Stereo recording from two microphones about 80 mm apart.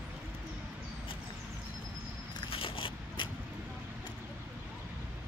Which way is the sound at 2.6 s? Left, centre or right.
Left.